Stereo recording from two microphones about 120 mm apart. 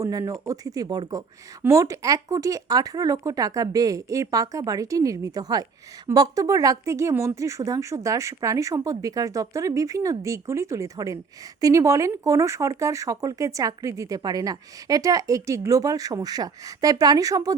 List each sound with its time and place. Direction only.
0.0 s speech: 30° right (ahead or behind)